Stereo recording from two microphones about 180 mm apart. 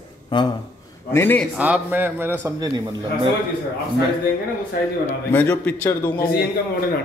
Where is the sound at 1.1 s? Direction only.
10° left (ahead or behind).